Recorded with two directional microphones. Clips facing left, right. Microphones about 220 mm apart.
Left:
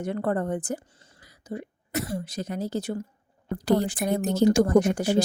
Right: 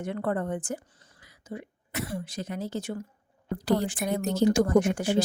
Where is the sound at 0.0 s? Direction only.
40° left (ahead or behind).